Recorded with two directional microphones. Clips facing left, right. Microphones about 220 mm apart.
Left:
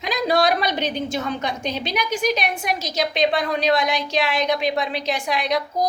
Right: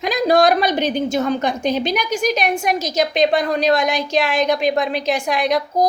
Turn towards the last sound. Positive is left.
turn(degrees=-45)  # may be behind; listen again after turning